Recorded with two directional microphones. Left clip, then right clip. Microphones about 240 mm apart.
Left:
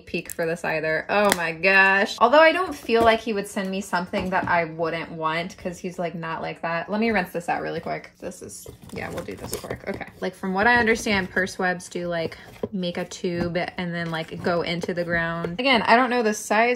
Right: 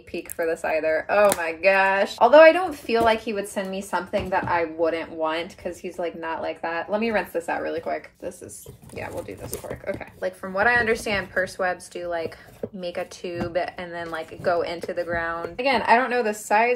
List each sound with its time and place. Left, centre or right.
0.2 s speech: left
9.9 s speech: left